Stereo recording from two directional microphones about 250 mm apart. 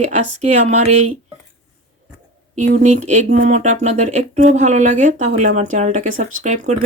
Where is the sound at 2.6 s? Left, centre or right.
Right.